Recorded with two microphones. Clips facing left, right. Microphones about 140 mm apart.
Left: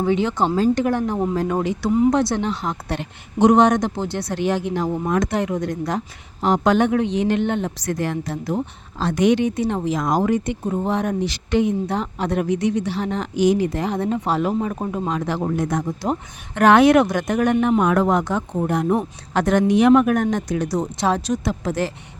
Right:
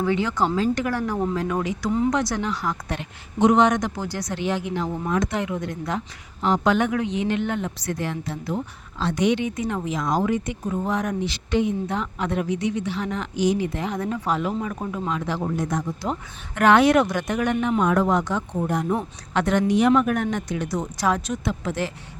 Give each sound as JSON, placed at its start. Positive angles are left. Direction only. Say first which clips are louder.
{"t": 0.0, "sound": "a woman's voice", "louder": "left 3 dB", "side_deg": 20}
{"t": 0.5, "sound": "speech", "louder": "left 4 dB", "side_deg": 40}
{"t": 0.9, "sound": "a woman's voice", "louder": "left 4 dB", "side_deg": 20}
{"t": 4.4, "sound": "speech", "louder": "left 4 dB", "side_deg": 50}
{"t": 6.8, "sound": "a woman's voice", "louder": "left 5 dB", "side_deg": 30}
{"t": 7.9, "sound": "speech", "louder": "left 5 dB", "side_deg": 45}
{"t": 9.9, "sound": "speech", "louder": "left 2 dB", "side_deg": 45}
{"t": 10.4, "sound": "a woman's voice", "louder": "left 4 dB", "side_deg": 30}
{"t": 12.4, "sound": "speech", "louder": "left 5 dB", "side_deg": 50}
{"t": 12.8, "sound": "speech", "louder": "left 3 dB", "side_deg": 35}
{"t": 13.3, "sound": "speech", "louder": "left 5 dB", "side_deg": 50}
{"t": 17.8, "sound": "speech", "louder": "left 2 dB", "side_deg": 60}
{"t": 19.3, "sound": "speech", "louder": "left 3 dB", "side_deg": 45}